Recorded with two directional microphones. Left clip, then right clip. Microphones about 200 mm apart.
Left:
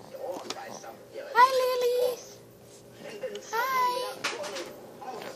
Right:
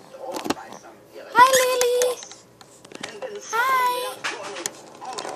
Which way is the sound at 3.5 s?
15° right (ahead or behind).